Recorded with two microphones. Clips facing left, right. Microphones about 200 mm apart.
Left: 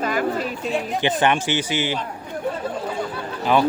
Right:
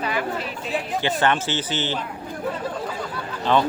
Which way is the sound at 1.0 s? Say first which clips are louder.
Left 2 dB; 15° left (ahead or behind).